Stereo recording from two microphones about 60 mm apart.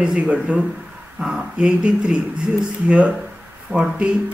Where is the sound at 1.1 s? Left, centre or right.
Centre.